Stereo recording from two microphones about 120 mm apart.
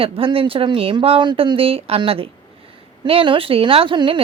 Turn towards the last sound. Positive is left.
turn(degrees=-45)  # may be behind; listen again after turning